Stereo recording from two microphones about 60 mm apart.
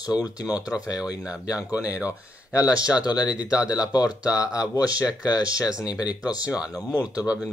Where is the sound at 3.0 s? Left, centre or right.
Left.